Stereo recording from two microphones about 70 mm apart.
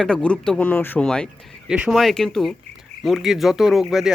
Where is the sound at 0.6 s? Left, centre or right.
Left.